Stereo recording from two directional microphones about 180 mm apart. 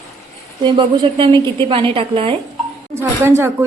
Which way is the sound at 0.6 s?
25° right (ahead or behind).